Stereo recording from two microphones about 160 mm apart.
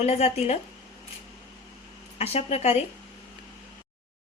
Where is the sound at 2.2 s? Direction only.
40° left (ahead or behind).